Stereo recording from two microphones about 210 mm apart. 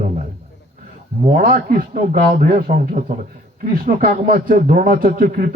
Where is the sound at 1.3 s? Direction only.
45° right (ahead or behind).